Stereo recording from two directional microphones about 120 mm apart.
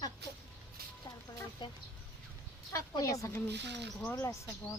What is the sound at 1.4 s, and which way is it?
Speech, 40° left (ahead or behind).